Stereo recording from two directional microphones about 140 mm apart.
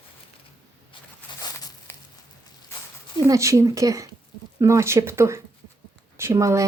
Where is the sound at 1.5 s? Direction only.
20° left (ahead or behind).